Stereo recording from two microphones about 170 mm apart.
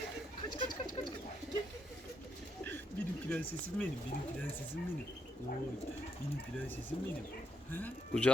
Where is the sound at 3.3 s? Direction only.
10° left (ahead or behind).